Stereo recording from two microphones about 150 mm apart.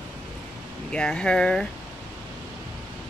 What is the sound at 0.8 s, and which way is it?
Speech, 5° left (ahead or behind).